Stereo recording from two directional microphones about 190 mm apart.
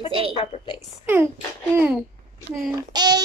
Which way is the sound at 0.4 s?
30° left (ahead or behind).